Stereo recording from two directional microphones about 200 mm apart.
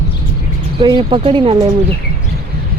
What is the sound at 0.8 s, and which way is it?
Speech, 20° right (ahead or behind).